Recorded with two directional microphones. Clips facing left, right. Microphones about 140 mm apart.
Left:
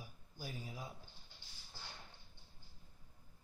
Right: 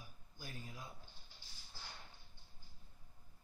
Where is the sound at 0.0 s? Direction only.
10° left (ahead or behind).